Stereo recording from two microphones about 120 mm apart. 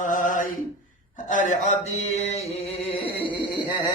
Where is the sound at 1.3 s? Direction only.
90° left; by 3.1 s 55° left (ahead or behind).